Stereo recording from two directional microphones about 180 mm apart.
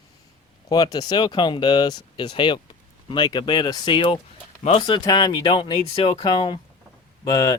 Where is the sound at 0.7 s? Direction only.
20° left (ahead or behind).